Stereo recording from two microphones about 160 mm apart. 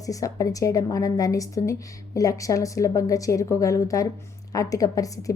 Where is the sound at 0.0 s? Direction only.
20° left (ahead or behind).